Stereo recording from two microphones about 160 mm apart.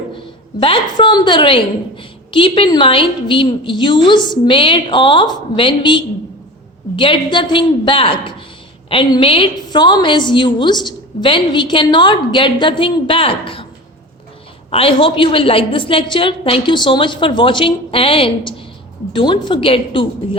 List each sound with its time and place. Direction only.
0.6 s a woman's voice: 30° left (ahead or behind)
14.7 s a woman's voice: 35° left (ahead or behind)